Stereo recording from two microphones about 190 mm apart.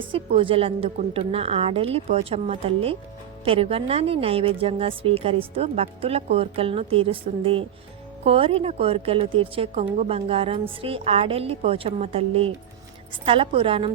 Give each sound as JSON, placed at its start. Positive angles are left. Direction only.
{"t": 0.0, "sound": "a woman's voice", "side_deg": -30}